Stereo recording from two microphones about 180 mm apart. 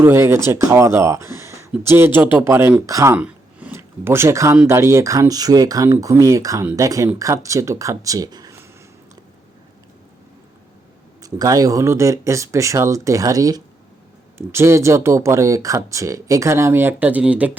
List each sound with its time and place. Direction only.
0.0 s speech: 15° right (ahead or behind)
11.2 s speech: 20° right (ahead or behind)